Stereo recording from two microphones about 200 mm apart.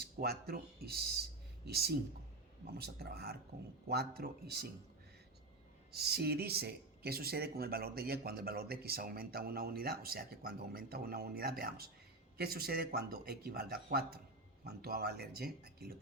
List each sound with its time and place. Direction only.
0.0 s speech: 50° right (ahead or behind)
5.9 s speech: 55° right (ahead or behind)